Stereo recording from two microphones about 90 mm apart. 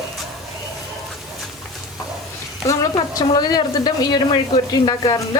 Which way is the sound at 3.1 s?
45° left (ahead or behind).